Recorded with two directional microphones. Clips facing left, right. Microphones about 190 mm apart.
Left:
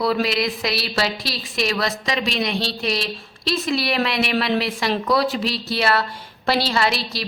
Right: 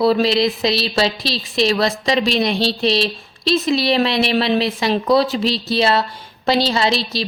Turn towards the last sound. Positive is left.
turn(degrees=-25)  # may be behind; listen again after turning